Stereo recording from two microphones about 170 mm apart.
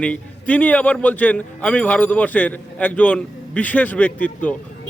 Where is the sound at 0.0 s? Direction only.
10° left (ahead or behind).